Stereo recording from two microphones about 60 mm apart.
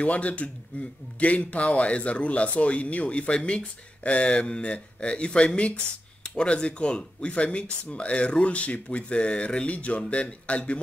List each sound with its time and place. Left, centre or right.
0.0 s speech: left